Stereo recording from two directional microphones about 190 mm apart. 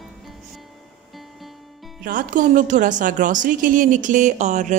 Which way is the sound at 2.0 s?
45° right (ahead or behind).